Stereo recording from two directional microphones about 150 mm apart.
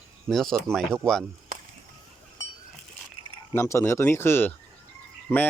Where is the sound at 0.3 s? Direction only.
Centre (ahead or behind).